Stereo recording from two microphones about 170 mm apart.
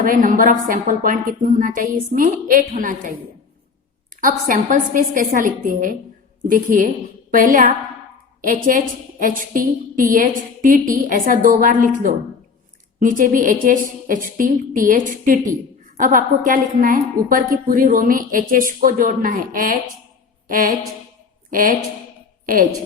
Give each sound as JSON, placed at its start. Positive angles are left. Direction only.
{"t": 0.0, "sound": "a woman's voice", "side_deg": -50}
{"t": 4.2, "sound": "a woman's voice", "side_deg": -55}